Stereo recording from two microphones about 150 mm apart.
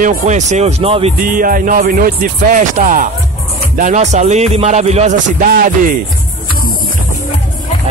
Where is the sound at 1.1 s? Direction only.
65° right (ahead or behind); by 5.5 s 50° right (ahead or behind).